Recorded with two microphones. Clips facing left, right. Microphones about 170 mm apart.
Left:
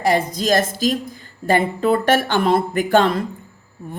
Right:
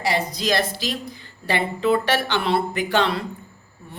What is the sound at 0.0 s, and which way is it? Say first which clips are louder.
Speech: left 5 dB; 50° left (ahead or behind).